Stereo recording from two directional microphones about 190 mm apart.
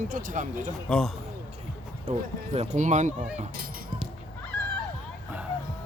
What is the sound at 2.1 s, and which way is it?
Speech, 35° right (ahead or behind).